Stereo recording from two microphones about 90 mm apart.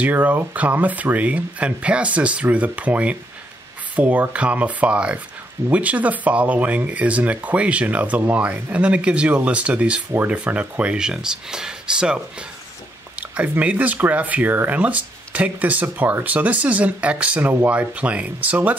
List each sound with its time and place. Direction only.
0.0 s speech: 20° right (ahead or behind)